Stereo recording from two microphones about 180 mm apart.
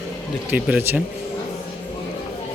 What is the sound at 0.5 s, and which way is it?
Speech, 10° right (ahead or behind).